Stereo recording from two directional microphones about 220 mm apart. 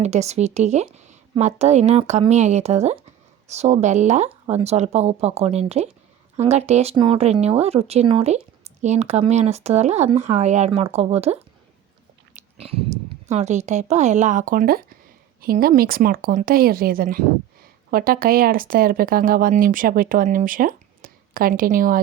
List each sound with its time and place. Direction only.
0.0 s a woman's voice: 30° right (ahead or behind)
12.3 s a sound: 30° right (ahead or behind)
13.2 s speech: 30° right (ahead or behind)